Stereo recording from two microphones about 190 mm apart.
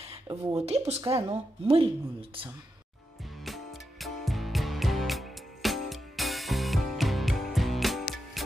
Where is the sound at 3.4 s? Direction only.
Centre (ahead or behind).